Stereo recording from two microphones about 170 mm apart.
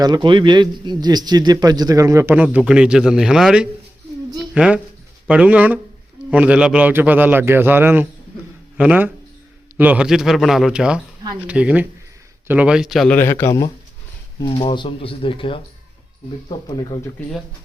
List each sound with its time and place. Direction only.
0.0 s a man's voice: 25° right (ahead or behind); by 3.7 s 5° right (ahead or behind)
4.4 s a sound: 5° right (ahead or behind)
5.3 s a man's voice: 10° right (ahead or behind)
13.1 s a man's voice: 15° left (ahead or behind)
14.3 s speech: 30° left (ahead or behind)
16.6 s speech: 25° left (ahead or behind)